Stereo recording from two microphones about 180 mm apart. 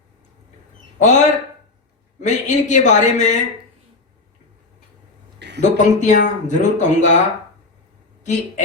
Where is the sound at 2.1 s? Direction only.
40° left (ahead or behind).